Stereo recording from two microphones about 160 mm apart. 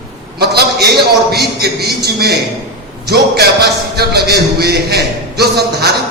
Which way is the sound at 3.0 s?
80° right.